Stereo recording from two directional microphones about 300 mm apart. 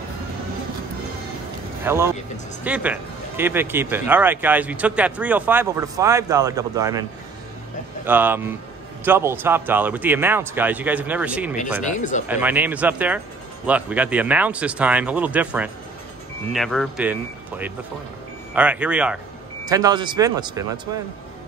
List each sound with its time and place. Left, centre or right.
1.9 s a man's voice: centre
11.8 s speech: left
12.3 s a man's voice: centre